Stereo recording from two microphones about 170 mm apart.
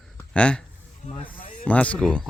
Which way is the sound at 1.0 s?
45° left (ahead or behind).